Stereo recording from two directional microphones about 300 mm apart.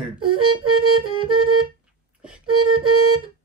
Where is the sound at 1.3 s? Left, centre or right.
Right.